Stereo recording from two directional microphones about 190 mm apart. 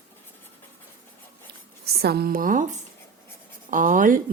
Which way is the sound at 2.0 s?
55° right (ahead or behind).